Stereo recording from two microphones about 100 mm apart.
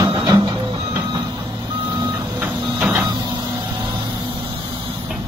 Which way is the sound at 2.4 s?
10° right (ahead or behind).